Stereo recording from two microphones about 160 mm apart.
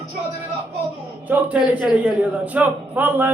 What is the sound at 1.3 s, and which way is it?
Speech, 10° right (ahead or behind).